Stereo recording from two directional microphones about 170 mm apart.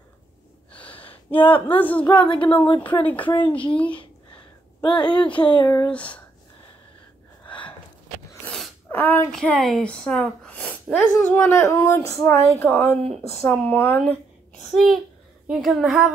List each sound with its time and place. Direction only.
0.8 s a sound: 30° left (ahead or behind)
1.4 s speech: 10° left (ahead or behind)
2.0 s speech: 30° left (ahead or behind)
2.5 s speech: 10° left (ahead or behind)
4.9 s speech: 25° left (ahead or behind)
5.9 s speech: 5° left (ahead or behind)
8.5 s a child's voice: 10° left (ahead or behind)